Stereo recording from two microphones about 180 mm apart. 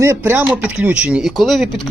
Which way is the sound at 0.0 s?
15° right (ahead or behind).